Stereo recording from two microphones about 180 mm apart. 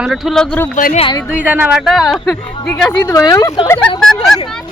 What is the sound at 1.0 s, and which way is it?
Speech, 25° left (ahead or behind).